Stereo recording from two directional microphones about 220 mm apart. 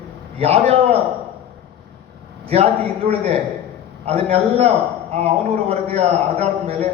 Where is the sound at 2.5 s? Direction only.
25° right (ahead or behind).